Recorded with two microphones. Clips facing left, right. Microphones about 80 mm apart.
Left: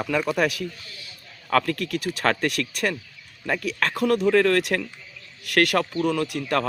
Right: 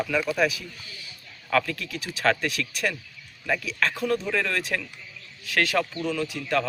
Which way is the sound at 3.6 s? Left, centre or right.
Left.